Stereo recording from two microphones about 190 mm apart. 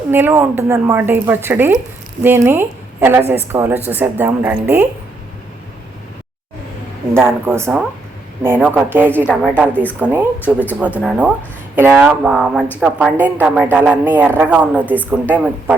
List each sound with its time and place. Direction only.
0.1 s a woman's voice: 10° right (ahead or behind)
7.1 s a woman's voice: 10° right (ahead or behind)